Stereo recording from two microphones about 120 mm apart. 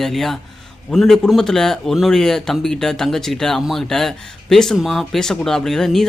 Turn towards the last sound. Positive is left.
turn(degrees=5)  # may be behind; listen again after turning